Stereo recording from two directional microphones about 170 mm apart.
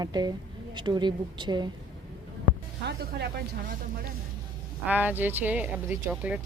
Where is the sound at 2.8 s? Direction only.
75° right (ahead or behind).